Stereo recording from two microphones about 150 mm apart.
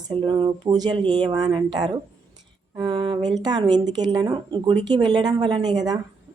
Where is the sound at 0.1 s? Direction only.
30° right (ahead or behind).